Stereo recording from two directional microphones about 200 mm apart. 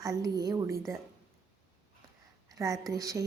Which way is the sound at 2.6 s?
15° right (ahead or behind).